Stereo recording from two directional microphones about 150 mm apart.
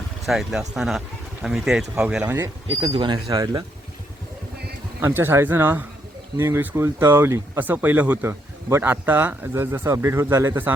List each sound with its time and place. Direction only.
0.3 s speech: centre (ahead or behind)
2.9 s speech: 30° right (ahead or behind)
4.9 s speech: 15° right (ahead or behind)